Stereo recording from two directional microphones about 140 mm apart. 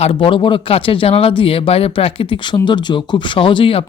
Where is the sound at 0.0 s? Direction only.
40° left (ahead or behind).